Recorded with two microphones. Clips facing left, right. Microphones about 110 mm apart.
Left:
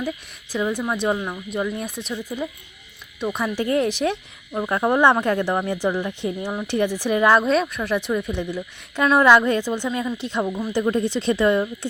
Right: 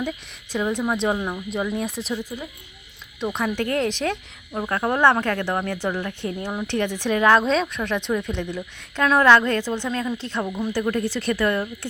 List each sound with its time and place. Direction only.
0.5 s a woman's voice: 5° left (ahead or behind)